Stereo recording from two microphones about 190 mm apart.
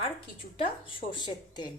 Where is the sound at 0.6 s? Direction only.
25° left (ahead or behind).